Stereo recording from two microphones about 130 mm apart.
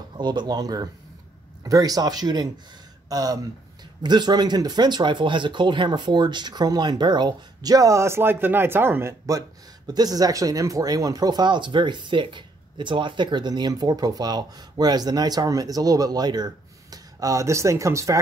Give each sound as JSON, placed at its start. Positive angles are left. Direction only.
{"t": 0.2, "sound": "speech", "side_deg": -35}